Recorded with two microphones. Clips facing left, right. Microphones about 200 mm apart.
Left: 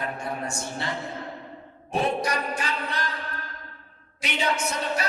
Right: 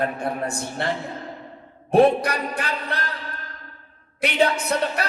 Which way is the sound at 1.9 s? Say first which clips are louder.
Right 9 dB; 60° right (ahead or behind).